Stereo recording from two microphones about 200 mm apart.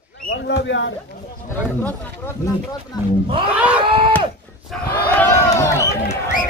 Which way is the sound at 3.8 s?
25° right (ahead or behind).